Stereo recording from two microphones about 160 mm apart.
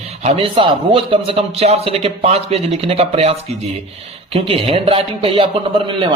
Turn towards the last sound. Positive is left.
turn(degrees=-30)  # may be behind; listen again after turning